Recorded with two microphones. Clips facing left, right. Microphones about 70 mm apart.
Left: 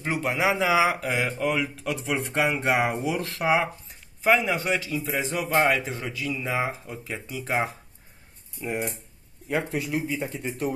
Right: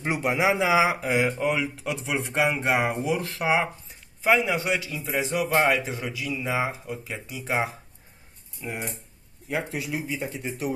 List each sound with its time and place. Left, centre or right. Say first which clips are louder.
0.0 s speech: right 1 dB; centre
8.6 s speech: left 4 dB; centre